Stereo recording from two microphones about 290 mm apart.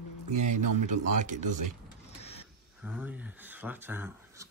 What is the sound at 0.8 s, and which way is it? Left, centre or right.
Speech, right.